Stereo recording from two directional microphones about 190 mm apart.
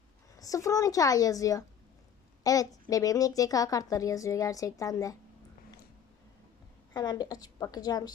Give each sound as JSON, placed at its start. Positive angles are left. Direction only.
{"t": 0.3, "sound": "a woman's voice", "side_deg": 15}
{"t": 6.9, "sound": "a woman's voice", "side_deg": 20}